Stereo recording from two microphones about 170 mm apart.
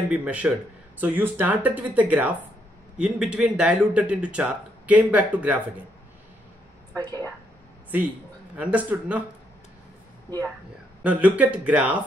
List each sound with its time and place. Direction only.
0.1 s speech: 10° right (ahead or behind)
7.9 s speech: 10° right (ahead or behind)
10.3 s speech: 25° right (ahead or behind)
11.1 s speech: 10° right (ahead or behind)